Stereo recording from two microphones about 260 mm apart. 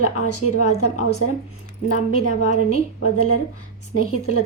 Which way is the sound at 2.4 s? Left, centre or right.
Left.